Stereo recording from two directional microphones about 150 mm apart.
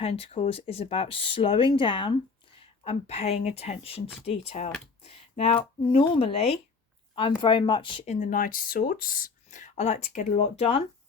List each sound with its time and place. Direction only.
0.0 s speech: 40° left (ahead or behind)
8.1 s speech: 60° left (ahead or behind); by 10.8 s 40° left (ahead or behind)